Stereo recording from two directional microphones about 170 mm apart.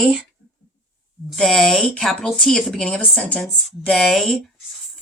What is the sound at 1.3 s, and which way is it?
Speech, centre (ahead or behind).